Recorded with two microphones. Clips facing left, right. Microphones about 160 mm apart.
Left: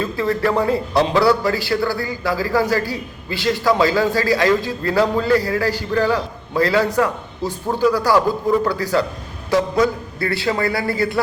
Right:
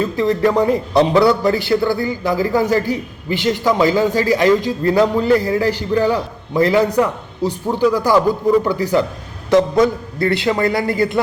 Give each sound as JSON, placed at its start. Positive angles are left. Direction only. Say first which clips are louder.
{"t": 0.0, "sound": "a man's voice", "louder": "right 4 dB", "side_deg": -20}